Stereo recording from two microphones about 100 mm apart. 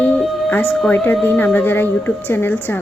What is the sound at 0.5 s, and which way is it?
Speech, 20° left (ahead or behind).